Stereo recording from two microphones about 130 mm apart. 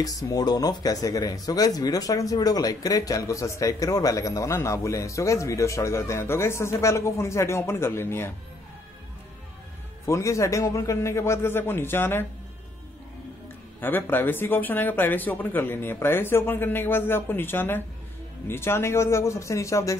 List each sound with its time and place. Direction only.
0.0 s speech: 25° left (ahead or behind)
10.0 s speech: 25° left (ahead or behind)
13.7 s speech: 15° left (ahead or behind)